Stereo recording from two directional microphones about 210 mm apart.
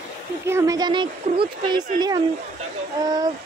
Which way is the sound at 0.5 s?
15° right (ahead or behind).